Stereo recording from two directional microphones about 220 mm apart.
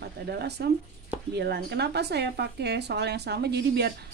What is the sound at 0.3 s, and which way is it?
Speech, 50° right (ahead or behind).